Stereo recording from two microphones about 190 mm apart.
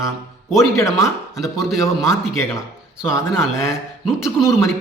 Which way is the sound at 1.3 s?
Centre (ahead or behind).